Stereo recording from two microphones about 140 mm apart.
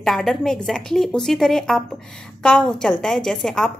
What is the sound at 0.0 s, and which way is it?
A woman's voice, centre (ahead or behind).